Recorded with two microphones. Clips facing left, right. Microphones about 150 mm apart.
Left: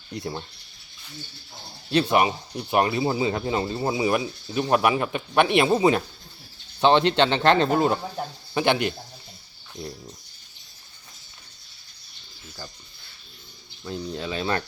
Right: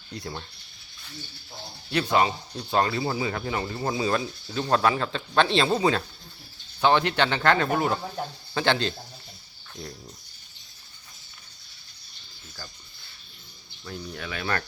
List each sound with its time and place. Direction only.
0.1 s speech: 20° left (ahead or behind)
1.9 s speech: 25° left (ahead or behind)
13.8 s speech: 20° left (ahead or behind)